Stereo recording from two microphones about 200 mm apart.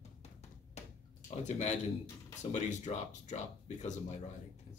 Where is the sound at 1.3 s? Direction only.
35° left (ahead or behind).